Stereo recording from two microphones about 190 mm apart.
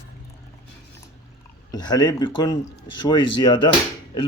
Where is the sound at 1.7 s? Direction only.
20° left (ahead or behind).